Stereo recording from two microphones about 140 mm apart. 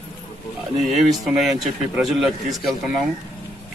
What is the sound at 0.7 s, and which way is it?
A man's voice, centre (ahead or behind).